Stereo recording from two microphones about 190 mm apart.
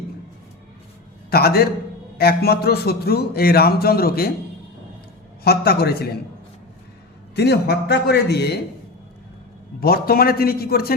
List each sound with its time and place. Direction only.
1.3 s a man's voice: 55° left (ahead or behind)
5.4 s speech: 55° left (ahead or behind)
7.3 s speech: 60° left (ahead or behind)
9.8 s a man's voice: 50° left (ahead or behind)